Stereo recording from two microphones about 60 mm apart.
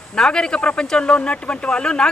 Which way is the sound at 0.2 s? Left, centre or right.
Centre.